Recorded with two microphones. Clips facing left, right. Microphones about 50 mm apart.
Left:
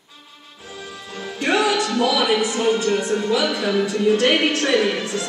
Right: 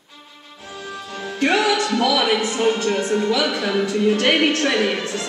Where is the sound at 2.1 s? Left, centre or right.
Right.